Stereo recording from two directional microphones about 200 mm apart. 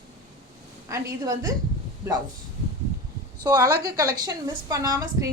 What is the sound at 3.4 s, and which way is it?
A woman's voice, 20° right (ahead or behind).